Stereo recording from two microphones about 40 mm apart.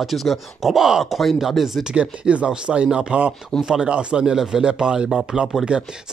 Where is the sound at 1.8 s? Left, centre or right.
Right.